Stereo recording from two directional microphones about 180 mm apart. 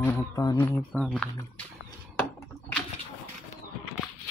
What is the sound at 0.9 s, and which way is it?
Speech, 5° left (ahead or behind).